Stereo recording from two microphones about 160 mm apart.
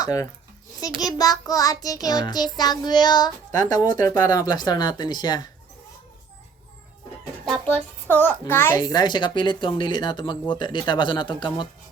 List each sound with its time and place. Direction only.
0.0 s a woman's voice: 20° left (ahead or behind)
7.4 s a child's voice: centre (ahead or behind)
8.0 s a woman's voice: 10° left (ahead or behind); by 11.7 s 30° left (ahead or behind)